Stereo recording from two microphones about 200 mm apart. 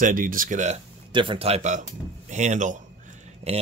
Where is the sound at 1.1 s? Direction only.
25° right (ahead or behind).